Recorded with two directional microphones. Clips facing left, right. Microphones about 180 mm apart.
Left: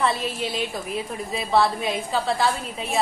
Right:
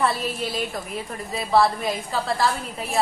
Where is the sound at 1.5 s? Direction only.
Centre (ahead or behind).